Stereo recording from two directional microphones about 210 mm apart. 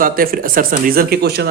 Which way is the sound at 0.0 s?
45° right (ahead or behind).